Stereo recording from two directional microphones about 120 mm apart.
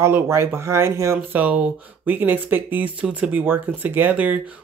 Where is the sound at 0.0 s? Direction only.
20° right (ahead or behind).